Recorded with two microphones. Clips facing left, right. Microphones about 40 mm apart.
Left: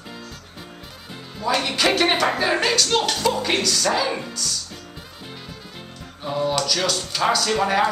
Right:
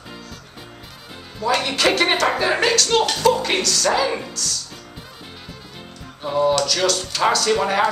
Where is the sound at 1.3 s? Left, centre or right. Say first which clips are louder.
Right 2 dB; centre.